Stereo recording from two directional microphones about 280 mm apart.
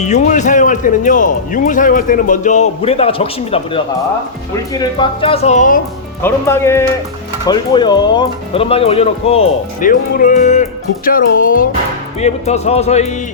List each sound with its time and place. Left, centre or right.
0.0 s speech: left
4.8 s speech: centre
6.2 s speech: centre